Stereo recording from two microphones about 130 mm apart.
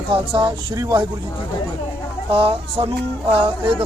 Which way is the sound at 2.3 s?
45° right (ahead or behind).